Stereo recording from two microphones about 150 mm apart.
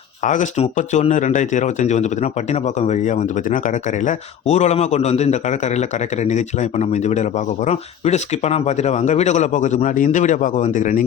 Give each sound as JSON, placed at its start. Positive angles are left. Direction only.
{"t": 0.2, "sound": "speech", "side_deg": 55}